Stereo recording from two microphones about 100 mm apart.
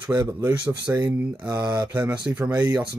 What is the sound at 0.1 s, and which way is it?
Speech, 20° right (ahead or behind).